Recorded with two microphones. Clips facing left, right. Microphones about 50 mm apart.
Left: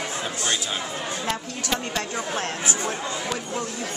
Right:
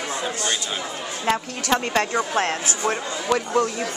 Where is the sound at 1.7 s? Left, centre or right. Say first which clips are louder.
Right 7 dB; right.